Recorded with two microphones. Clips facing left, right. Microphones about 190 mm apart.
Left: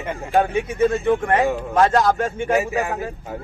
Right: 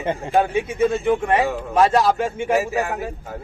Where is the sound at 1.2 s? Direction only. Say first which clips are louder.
Left 1 dB; 15° right (ahead or behind).